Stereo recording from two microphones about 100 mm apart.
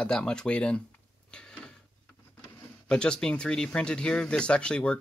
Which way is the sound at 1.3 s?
10° left (ahead or behind).